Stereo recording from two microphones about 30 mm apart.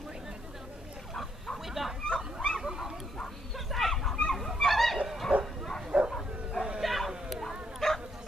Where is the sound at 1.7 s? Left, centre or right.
Centre.